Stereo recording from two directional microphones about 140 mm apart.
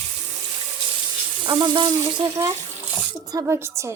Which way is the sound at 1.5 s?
35° right (ahead or behind).